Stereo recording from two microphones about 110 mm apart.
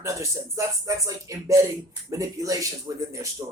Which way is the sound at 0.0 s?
30° right (ahead or behind).